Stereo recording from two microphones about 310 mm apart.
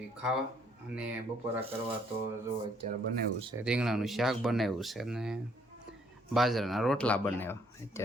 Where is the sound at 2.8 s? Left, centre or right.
Right.